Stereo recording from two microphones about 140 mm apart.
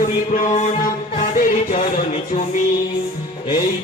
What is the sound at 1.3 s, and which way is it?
Music, 70° left (ahead or behind).